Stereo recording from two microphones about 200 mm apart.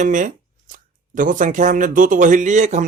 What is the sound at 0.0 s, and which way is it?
Speech, 40° right (ahead or behind).